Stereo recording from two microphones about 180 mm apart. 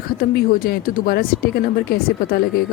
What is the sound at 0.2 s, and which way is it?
Speech, 55° left (ahead or behind).